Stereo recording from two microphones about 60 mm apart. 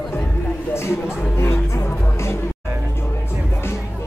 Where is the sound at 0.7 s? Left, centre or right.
Left.